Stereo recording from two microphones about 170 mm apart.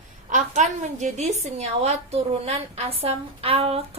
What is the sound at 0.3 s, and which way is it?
A woman's voice, 45° right (ahead or behind).